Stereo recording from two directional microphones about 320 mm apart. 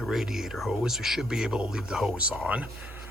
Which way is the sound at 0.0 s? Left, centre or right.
Centre.